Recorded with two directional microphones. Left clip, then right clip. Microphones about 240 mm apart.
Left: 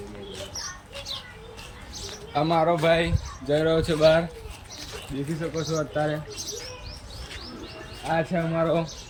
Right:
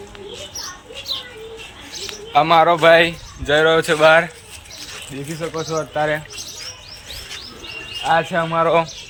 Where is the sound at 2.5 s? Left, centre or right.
Right.